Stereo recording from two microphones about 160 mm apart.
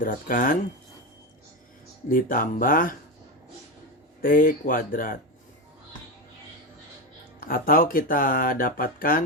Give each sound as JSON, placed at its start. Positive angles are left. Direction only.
{"t": 0.0, "sound": "speech", "side_deg": 55}
{"t": 2.0, "sound": "speech", "side_deg": 60}
{"t": 4.2, "sound": "speech", "side_deg": 60}
{"t": 7.3, "sound": "speech", "side_deg": 65}